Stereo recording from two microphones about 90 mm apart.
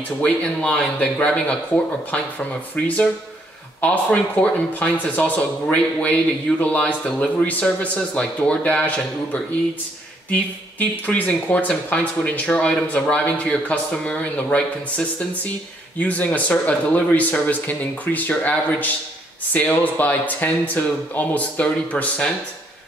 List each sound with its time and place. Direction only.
0.2 s a man's voice: 15° left (ahead or behind)